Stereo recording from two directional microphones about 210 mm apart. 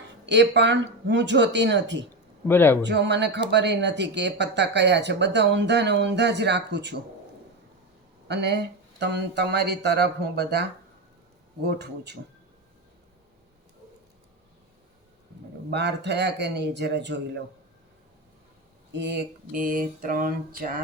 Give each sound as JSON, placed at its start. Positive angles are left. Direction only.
{"t": 0.3, "sound": "speech", "side_deg": -55}
{"t": 2.5, "sound": "a man's voice", "side_deg": 10}
{"t": 2.8, "sound": "speech", "side_deg": -55}
{"t": 8.3, "sound": "speech", "side_deg": -55}
{"t": 15.7, "sound": "speech", "side_deg": -55}
{"t": 18.9, "sound": "a sound", "side_deg": -55}